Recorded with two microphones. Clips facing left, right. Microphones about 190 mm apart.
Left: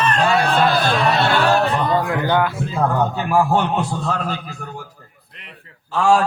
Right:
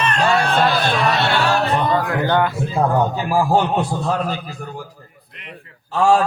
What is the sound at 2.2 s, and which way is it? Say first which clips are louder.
Speech: right 2 dB; 5° left (ahead or behind).